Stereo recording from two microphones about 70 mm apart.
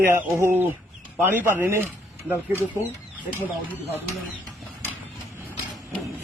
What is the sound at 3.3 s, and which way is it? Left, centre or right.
Speech, left.